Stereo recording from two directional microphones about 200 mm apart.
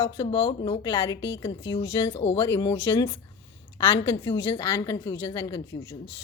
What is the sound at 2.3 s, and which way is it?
Speech, 15° left (ahead or behind).